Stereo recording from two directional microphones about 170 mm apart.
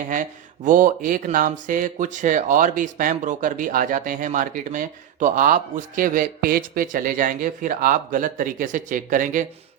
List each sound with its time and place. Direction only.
0.1 s speech: 50° right (ahead or behind)